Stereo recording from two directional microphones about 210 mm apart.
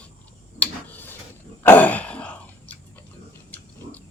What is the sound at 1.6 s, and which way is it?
Throat clearing, 10° left (ahead or behind).